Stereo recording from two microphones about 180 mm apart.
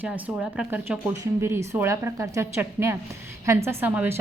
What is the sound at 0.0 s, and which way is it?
A woman's voice, 10° right (ahead or behind).